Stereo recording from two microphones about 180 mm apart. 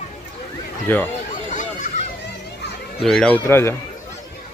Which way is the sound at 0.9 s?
10° left (ahead or behind).